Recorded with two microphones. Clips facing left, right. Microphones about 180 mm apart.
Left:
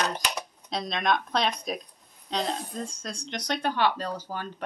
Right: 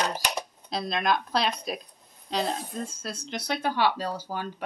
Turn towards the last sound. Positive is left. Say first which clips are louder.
# right 1 dB
turn(degrees=-10)  # may be behind; listen again after turning